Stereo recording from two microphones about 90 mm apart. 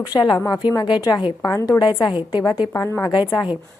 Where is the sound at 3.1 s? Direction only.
55° left (ahead or behind).